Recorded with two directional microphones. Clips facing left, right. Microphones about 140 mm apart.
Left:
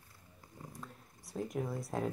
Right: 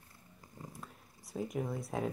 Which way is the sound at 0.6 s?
Centre (ahead or behind).